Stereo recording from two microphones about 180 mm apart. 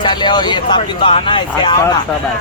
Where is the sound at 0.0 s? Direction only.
25° left (ahead or behind).